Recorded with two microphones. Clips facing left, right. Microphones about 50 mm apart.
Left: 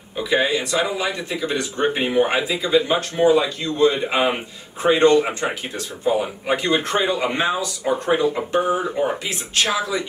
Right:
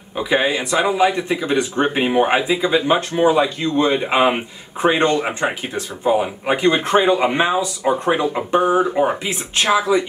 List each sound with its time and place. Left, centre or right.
0.2 s speech: right